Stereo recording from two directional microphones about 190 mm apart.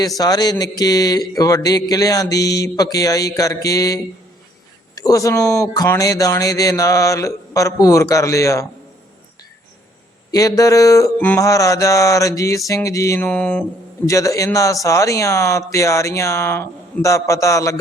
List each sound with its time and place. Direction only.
0.2 s speech: 20° left (ahead or behind)
10.3 s speech: 20° left (ahead or behind)